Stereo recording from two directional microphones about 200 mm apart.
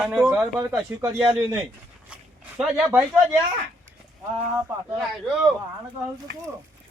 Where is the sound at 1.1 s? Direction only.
15° right (ahead or behind).